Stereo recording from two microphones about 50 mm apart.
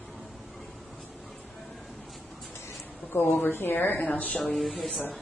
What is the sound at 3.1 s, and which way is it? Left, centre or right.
A woman's voice, left.